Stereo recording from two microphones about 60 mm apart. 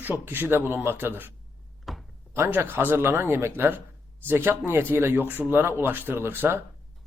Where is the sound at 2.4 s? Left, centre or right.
Right.